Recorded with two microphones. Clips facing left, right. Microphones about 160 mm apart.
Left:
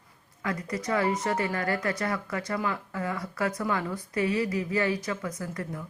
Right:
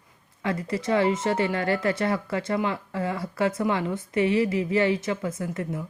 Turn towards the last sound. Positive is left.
turn(degrees=-25)  # may be behind; listen again after turning